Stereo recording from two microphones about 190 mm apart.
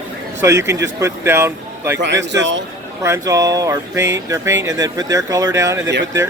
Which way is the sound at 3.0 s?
15° right (ahead or behind).